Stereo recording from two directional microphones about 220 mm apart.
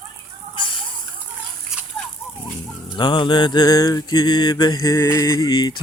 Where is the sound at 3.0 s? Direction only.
20° left (ahead or behind).